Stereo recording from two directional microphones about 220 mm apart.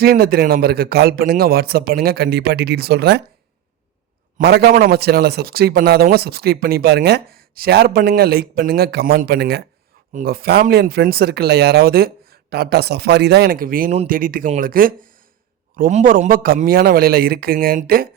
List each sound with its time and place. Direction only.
0.0 s speech: 45° right (ahead or behind)
4.4 s a man's voice: 45° right (ahead or behind)